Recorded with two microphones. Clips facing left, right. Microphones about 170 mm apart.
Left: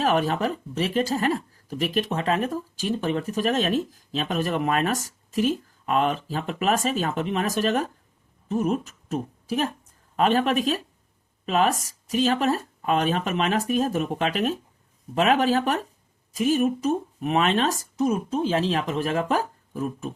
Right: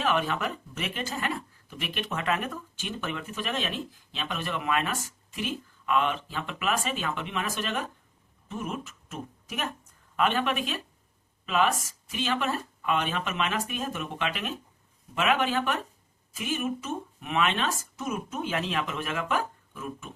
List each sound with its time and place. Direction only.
0.0 s speech: 40° left (ahead or behind)